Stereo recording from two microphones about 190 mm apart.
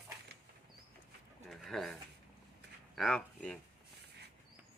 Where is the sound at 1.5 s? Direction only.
Centre (ahead or behind).